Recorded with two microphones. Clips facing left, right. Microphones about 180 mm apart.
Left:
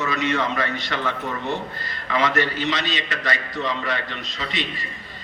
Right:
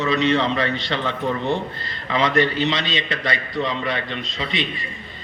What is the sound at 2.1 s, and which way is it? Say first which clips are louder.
A man's voice: right 3 dB; 20° right (ahead or behind).